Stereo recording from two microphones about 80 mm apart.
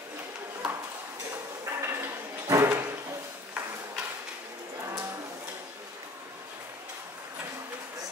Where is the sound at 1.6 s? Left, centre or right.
Right.